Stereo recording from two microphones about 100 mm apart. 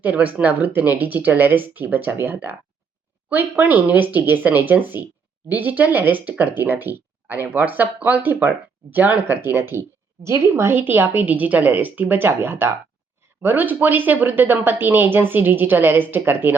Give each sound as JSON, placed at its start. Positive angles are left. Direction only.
{"t": 0.0, "sound": "speech", "side_deg": -15}